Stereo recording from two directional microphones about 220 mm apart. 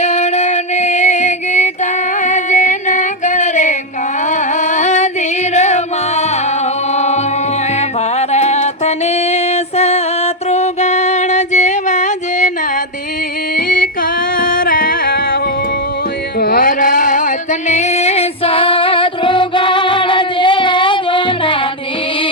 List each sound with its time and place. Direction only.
0.0 s music: 30° left (ahead or behind)
13.6 s music: 40° left (ahead or behind)
16.4 s music: 40° left (ahead or behind); by 21.7 s 20° left (ahead or behind)